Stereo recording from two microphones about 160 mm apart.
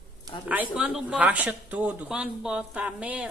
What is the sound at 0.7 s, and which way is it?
Speech, 5° right (ahead or behind).